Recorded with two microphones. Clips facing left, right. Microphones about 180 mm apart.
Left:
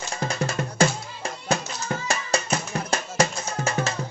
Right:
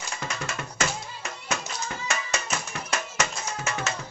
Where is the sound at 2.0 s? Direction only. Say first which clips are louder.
Left 5 dB; 35° left (ahead or behind).